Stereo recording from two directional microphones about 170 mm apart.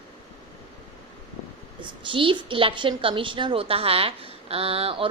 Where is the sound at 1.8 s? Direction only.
30° right (ahead or behind).